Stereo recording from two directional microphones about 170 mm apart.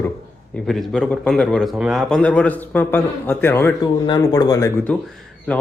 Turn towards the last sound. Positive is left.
turn(degrees=20)  # may be behind; listen again after turning